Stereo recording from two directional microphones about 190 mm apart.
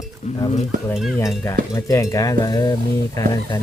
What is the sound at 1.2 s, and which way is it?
Speech, 15° left (ahead or behind).